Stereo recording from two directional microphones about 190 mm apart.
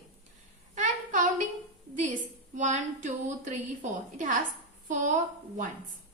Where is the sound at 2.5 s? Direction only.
40° right (ahead or behind).